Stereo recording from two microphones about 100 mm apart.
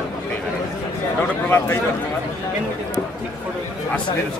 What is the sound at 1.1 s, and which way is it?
Speech, 20° left (ahead or behind).